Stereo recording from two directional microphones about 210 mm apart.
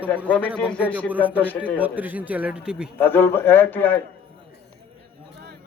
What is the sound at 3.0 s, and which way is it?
A man's voice, 10° left (ahead or behind).